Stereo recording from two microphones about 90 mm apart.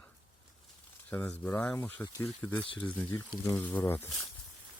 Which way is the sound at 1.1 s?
20° left (ahead or behind).